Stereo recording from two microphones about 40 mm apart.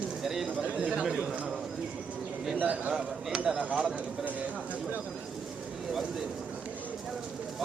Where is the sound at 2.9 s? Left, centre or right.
Centre.